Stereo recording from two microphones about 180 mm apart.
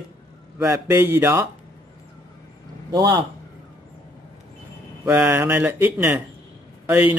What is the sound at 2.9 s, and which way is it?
Speech, 20° right (ahead or behind).